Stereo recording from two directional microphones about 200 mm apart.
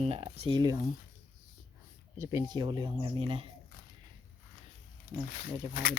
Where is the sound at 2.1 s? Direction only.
15° right (ahead or behind).